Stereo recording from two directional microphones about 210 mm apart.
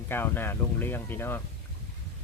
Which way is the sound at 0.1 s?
10° left (ahead or behind).